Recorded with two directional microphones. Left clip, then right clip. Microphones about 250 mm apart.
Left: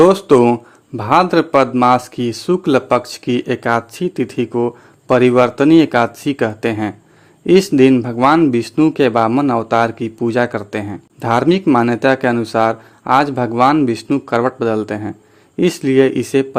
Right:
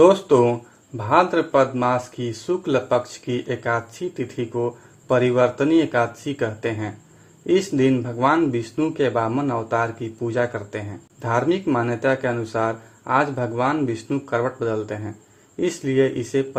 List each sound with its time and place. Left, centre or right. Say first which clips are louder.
0.0 s speech: left 5 dB; left